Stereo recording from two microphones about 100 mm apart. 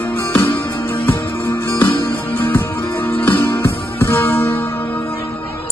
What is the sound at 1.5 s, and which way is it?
Music, 25° left (ahead or behind).